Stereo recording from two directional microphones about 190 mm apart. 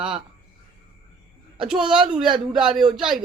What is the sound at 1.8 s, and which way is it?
Speech, 5° right (ahead or behind).